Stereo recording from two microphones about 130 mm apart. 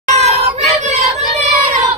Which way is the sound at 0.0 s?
60° right (ahead or behind).